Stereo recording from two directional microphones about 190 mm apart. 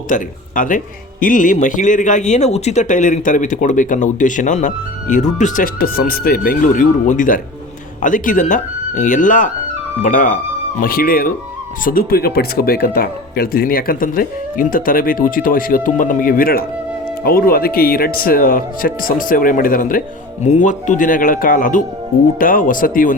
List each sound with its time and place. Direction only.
0.1 s speech: 45° left (ahead or behind)